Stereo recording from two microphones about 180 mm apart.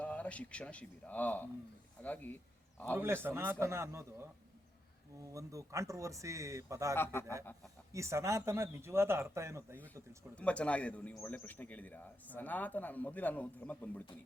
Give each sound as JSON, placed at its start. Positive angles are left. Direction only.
{"t": 0.0, "sound": "speech", "side_deg": 5}
{"t": 2.9, "sound": "speech", "side_deg": -15}
{"t": 5.3, "sound": "speech", "side_deg": -20}
{"t": 6.9, "sound": "speech", "side_deg": 15}
{"t": 7.9, "sound": "speech", "side_deg": -15}
{"t": 10.3, "sound": "speech", "side_deg": 5}